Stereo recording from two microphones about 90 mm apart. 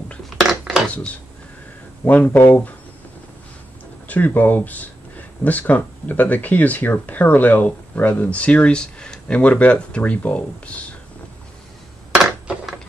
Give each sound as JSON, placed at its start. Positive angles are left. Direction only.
{"t": 0.3, "sound": "a sound", "side_deg": -5}
{"t": 0.8, "sound": "speech", "side_deg": 15}
{"t": 4.1, "sound": "speech", "side_deg": 20}